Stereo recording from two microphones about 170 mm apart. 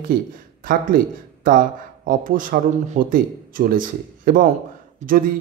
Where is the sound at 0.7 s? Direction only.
55° right (ahead or behind).